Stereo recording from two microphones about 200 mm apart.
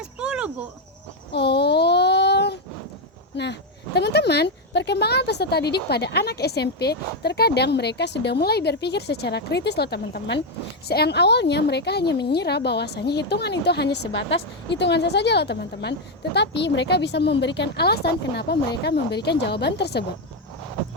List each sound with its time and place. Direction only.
0.0 s cricket: 5° right (ahead or behind)
1.3 s child singing: 55° left (ahead or behind)
3.3 s speech: 60° left (ahead or behind)
14.0 s speech: 70° left (ahead or behind)